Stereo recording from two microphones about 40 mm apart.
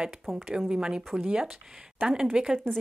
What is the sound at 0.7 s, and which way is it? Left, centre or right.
Speech, right.